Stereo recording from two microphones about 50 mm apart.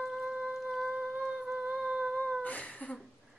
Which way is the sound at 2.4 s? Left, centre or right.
Left.